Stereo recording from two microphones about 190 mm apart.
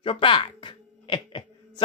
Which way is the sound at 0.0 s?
25° left (ahead or behind).